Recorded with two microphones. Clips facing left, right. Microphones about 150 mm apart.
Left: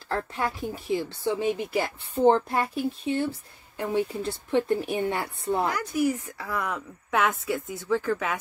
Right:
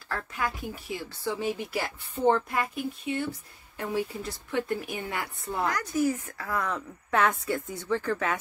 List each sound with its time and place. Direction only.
0.1 s a woman's voice: 30° left (ahead or behind)
5.7 s speech: 10° left (ahead or behind)